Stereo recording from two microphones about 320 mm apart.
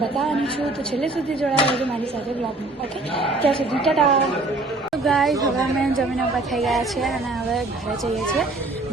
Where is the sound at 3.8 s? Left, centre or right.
Centre.